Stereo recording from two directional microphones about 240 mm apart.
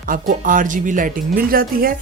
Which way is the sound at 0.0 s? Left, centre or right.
Right.